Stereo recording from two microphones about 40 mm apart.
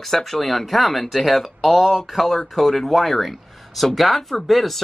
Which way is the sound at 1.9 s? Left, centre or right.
Centre.